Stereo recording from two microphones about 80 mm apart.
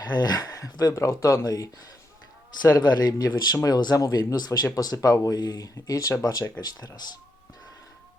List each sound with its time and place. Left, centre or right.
0.0 s speech: left
2.7 s a man's voice: left
6.6 s speech: left